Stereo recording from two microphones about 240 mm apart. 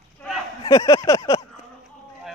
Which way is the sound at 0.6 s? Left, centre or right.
Centre.